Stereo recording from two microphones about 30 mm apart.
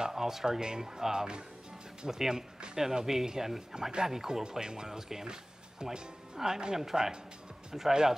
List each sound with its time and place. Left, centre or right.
0.1 s speech: centre